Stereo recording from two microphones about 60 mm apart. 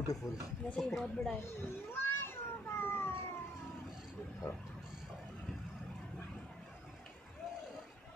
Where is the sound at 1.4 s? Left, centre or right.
Left.